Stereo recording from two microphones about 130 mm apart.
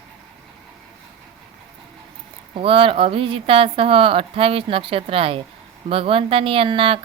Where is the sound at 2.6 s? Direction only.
45° right (ahead or behind).